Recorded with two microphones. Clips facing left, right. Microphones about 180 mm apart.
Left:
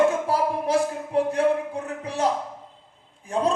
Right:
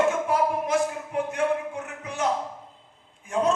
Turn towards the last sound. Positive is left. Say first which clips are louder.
# even
turn(degrees=35)  # may be behind; listen again after turning